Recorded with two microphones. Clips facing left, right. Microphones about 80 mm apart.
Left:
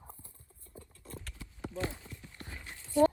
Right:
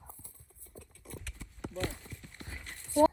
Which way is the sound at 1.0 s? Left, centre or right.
Right.